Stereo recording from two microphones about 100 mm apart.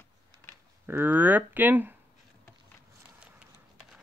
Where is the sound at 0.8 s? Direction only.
20° right (ahead or behind).